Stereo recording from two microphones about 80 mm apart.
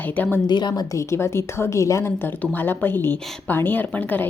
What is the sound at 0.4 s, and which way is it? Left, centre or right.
Speech, left.